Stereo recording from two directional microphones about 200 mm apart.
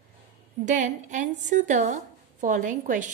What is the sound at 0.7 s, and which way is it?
A woman's voice, 40° right (ahead or behind).